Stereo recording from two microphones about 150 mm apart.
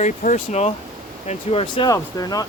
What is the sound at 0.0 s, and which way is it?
Speech, 60° left (ahead or behind).